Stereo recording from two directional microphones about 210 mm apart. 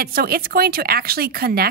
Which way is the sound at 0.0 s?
45° right (ahead or behind).